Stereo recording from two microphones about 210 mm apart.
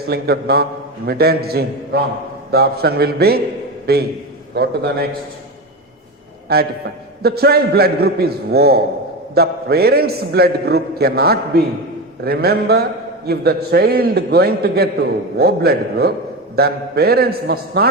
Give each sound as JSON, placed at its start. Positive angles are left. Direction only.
{"t": 0.0, "sound": "a man's voice", "side_deg": -50}
{"t": 6.5, "sound": "a man's voice", "side_deg": -45}